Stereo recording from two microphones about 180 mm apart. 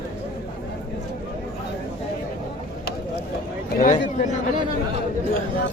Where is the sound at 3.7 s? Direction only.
50° left (ahead or behind).